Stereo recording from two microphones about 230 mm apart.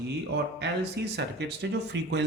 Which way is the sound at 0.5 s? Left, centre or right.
Right.